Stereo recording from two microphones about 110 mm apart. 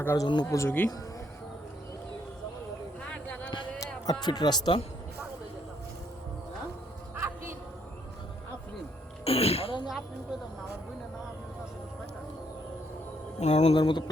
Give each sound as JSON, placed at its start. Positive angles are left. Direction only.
{"t": 0.0, "sound": "speech", "side_deg": 25}
{"t": 3.0, "sound": "a sound", "side_deg": 10}
{"t": 3.8, "sound": "speech", "side_deg": 40}
{"t": 7.2, "sound": "music", "side_deg": -20}
{"t": 9.2, "sound": "speech", "side_deg": 65}
{"t": 13.4, "sound": "speech", "side_deg": 90}
{"t": 13.7, "sound": "speech", "side_deg": 45}